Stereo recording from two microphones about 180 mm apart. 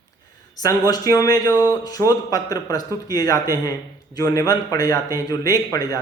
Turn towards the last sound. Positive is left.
turn(degrees=20)  # may be behind; listen again after turning